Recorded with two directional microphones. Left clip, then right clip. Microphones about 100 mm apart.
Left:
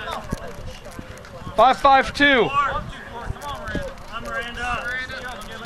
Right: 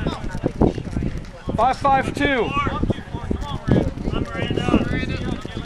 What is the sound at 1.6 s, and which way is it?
Speech, 30° left (ahead or behind).